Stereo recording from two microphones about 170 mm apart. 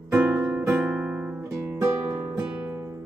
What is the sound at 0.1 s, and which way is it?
Guitar, 15° right (ahead or behind).